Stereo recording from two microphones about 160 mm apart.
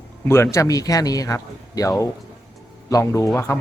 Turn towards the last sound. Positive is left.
turn(degrees=15)  # may be behind; listen again after turning